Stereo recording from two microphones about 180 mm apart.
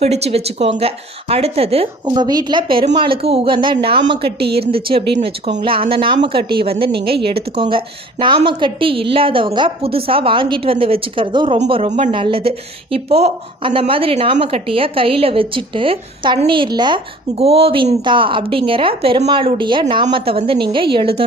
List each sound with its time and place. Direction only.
0.0 s speech: 35° right (ahead or behind)
2.0 s a woman's voice: 20° right (ahead or behind)
11.7 s speech: 35° right (ahead or behind)
12.1 s a woman's voice: 30° right (ahead or behind)